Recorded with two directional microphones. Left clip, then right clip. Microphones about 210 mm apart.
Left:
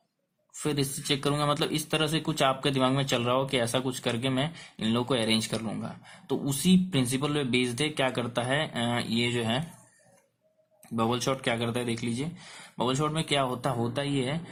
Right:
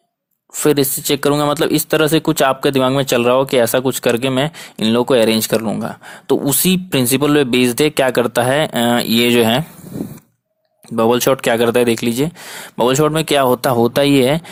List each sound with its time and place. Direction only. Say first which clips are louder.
0.6 s speech: right 16 dB; 45° right (ahead or behind)
10.9 s speech: right 15 dB; 45° right (ahead or behind)